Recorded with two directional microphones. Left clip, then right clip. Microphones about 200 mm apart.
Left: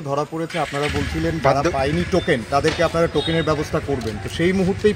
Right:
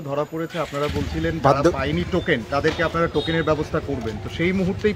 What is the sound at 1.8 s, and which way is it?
Speech, 60° left (ahead or behind).